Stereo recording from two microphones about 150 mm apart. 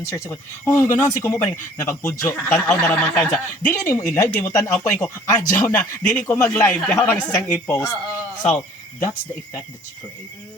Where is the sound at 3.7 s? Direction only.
20° left (ahead or behind).